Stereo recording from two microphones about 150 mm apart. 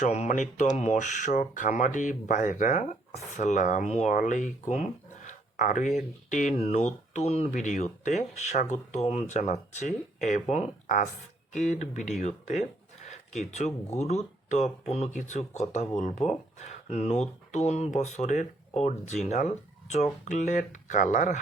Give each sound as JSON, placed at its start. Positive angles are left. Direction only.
{"t": 0.0, "sound": "speech", "side_deg": 50}
{"t": 12.2, "sound": "a sound", "side_deg": 50}
{"t": 14.0, "sound": "speech", "side_deg": 45}